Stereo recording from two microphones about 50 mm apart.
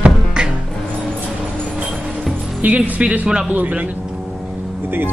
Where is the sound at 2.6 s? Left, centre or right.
Right.